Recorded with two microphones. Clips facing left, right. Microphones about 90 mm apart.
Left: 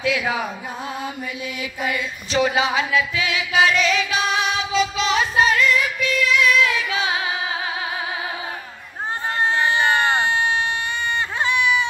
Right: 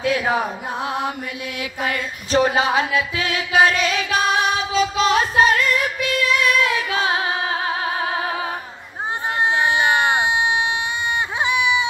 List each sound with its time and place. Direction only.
0.0 s music: 40° right (ahead or behind)
0.8 s music: 75° right (ahead or behind)
2.0 s music: 45° right (ahead or behind)
9.6 s a sound: 15° right (ahead or behind)
11.4 s baby cry: 15° right (ahead or behind)